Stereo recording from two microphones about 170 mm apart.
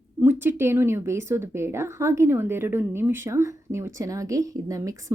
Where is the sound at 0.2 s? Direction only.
10° right (ahead or behind).